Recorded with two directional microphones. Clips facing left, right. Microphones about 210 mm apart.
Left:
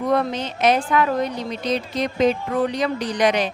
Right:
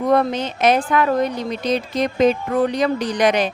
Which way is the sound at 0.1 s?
45° right (ahead or behind).